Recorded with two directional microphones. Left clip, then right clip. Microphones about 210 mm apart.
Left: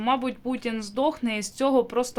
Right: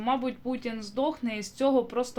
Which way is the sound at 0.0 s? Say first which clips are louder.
Left 3 dB; 15° left (ahead or behind).